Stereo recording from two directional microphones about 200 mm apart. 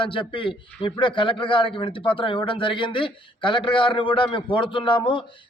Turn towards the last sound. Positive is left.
turn(degrees=25)  # may be behind; listen again after turning